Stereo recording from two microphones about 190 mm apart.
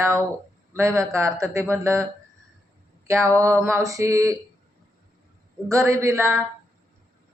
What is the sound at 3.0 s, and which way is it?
A man's voice, 15° right (ahead or behind).